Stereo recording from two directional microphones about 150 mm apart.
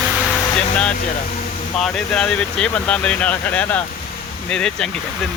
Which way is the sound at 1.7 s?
5° left (ahead or behind).